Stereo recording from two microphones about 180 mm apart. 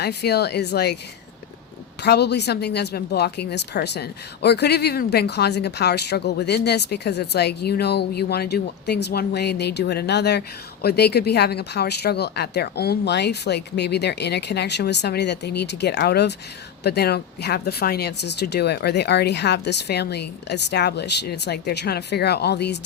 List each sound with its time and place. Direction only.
0.0 s speech: 65° left (ahead or behind)
2.0 s speech: 65° left (ahead or behind)